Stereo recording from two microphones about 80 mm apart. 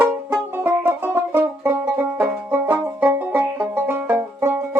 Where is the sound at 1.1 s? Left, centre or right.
Right.